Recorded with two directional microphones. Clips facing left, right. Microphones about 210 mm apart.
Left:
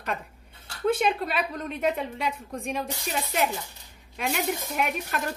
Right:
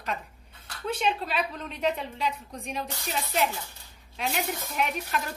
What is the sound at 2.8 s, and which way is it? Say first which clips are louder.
Speech: left 2 dB; 15° left (ahead or behind).